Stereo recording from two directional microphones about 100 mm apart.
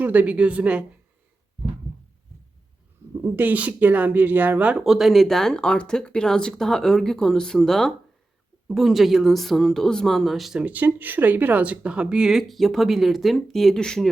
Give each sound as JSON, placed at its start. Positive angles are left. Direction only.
{"t": 0.0, "sound": "speech", "side_deg": -15}
{"t": 3.2, "sound": "speech", "side_deg": -20}
{"t": 4.8, "sound": "speech", "side_deg": -5}
{"t": 10.6, "sound": "speech", "side_deg": -15}